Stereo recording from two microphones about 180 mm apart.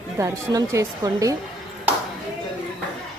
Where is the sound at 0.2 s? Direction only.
15° right (ahead or behind).